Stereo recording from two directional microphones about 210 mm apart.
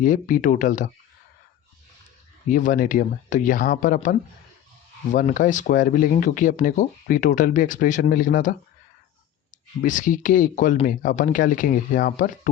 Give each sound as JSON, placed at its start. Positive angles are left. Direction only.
{"t": 0.0, "sound": "speech", "side_deg": 40}
{"t": 2.5, "sound": "speech", "side_deg": 40}
{"t": 5.1, "sound": "speech", "side_deg": 40}
{"t": 9.8, "sound": "speech", "side_deg": 40}